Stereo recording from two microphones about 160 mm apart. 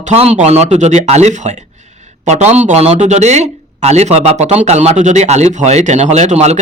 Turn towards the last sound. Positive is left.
turn(degrees=-45)  # may be behind; listen again after turning